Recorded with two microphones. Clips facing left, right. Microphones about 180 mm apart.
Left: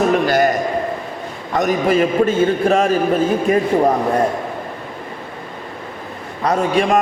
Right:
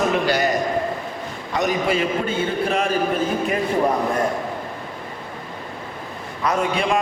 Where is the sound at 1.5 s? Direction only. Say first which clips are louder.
Left 5 dB; 50° left (ahead or behind).